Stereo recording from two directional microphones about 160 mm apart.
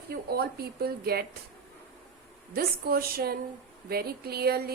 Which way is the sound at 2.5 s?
70° right (ahead or behind).